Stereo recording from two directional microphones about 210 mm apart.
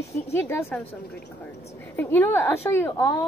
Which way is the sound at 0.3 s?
10° left (ahead or behind).